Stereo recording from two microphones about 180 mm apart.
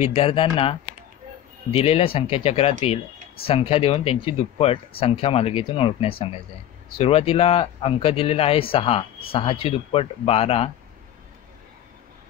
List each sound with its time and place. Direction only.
0.0 s speech: 35° left (ahead or behind)